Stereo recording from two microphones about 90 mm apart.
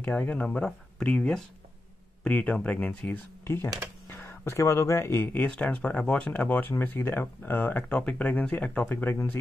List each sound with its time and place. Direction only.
0.0 s speech: 15° left (ahead or behind)
3.4 s speech: 25° left (ahead or behind)